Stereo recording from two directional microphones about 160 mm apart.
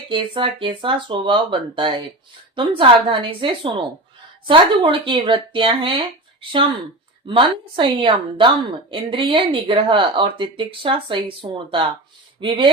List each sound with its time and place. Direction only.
0.1 s speech: 30° right (ahead or behind)